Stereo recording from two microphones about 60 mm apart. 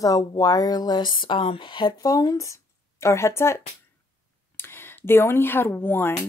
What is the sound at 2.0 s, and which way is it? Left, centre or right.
Speech, left.